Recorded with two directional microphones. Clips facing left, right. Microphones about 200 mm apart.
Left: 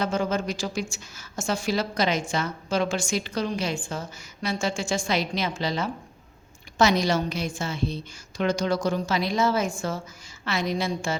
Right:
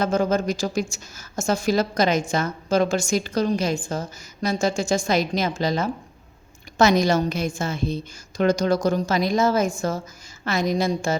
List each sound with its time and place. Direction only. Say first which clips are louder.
0.0 s a woman's voice: right 5 dB; 45° right (ahead or behind)